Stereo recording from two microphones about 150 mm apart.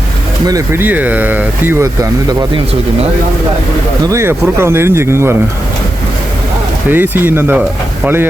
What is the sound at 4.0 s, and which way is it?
Speech, 20° right (ahead or behind).